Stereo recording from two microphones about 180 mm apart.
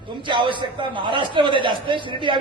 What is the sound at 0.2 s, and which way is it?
A man's voice, 25° right (ahead or behind).